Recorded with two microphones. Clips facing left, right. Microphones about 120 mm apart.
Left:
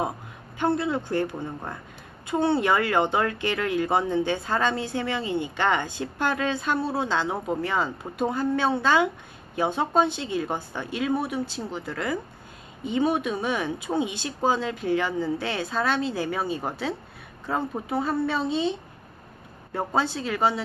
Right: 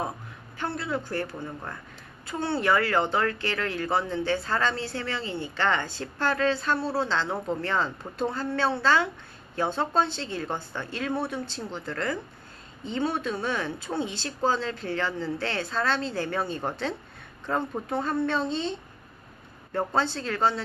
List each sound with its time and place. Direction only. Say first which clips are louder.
0.8 s speech: left 4 dB; 20° left (ahead or behind)